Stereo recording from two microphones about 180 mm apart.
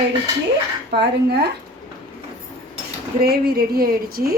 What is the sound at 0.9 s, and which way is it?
Speech, 65° right (ahead or behind).